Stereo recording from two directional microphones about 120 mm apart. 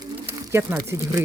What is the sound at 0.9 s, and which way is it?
Speech, 25° right (ahead or behind).